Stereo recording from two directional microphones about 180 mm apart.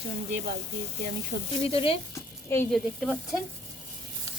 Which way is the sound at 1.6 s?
30° left (ahead or behind).